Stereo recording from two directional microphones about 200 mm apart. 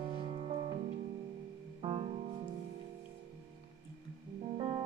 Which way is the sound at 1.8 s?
30° right (ahead or behind).